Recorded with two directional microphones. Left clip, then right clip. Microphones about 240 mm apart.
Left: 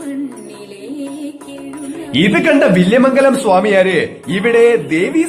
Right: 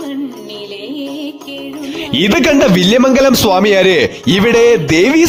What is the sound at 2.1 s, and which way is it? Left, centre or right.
A man's voice, right.